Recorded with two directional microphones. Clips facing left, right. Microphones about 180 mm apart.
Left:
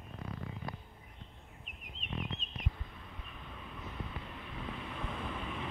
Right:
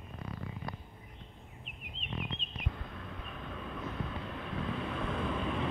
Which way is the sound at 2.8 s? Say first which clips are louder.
Right 7 dB; 90° right.